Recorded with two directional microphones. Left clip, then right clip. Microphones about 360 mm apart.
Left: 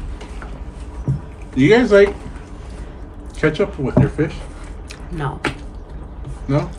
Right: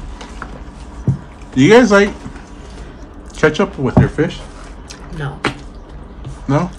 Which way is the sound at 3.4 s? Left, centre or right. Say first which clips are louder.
Right 4 dB; centre.